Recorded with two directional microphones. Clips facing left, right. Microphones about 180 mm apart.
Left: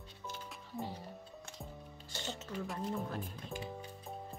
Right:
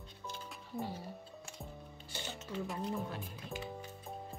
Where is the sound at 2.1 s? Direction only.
15° right (ahead or behind).